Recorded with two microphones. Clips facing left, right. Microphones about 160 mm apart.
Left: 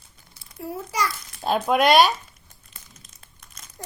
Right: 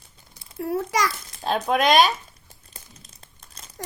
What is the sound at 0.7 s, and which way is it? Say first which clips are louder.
Speech: right 4 dB; 80° right.